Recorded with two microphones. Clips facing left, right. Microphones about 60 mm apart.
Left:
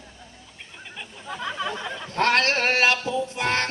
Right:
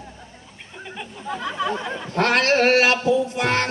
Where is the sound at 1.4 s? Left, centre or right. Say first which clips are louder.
Right 4 dB; right.